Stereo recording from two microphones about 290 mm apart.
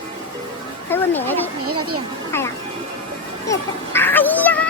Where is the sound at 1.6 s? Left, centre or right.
Right.